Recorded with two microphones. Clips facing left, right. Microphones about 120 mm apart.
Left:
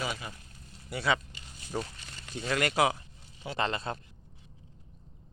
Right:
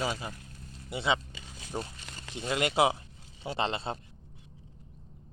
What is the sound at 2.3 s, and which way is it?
Speech, 20° right (ahead or behind).